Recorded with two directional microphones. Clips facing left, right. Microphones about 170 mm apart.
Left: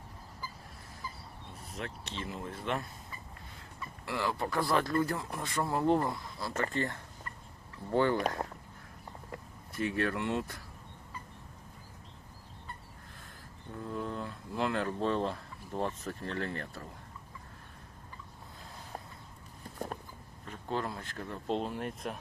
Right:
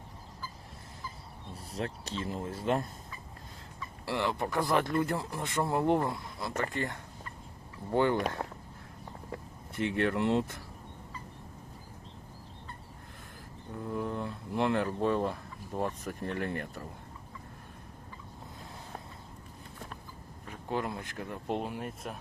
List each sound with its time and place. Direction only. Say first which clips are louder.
1.5 s speech: right 5 dB; 35° right (ahead or behind)
4.0 s speech: right 2 dB; 25° right (ahead or behind)
9.7 s speech: right 3 dB; 25° right (ahead or behind)
13.9 s a sound: right 3 dB; 15° right (ahead or behind)
14.8 s speech: right 2 dB; 10° right (ahead or behind)
20.5 s speech: right 1 dB; 15° right (ahead or behind)